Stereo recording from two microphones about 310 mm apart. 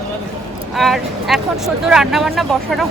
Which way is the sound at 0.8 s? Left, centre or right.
Centre.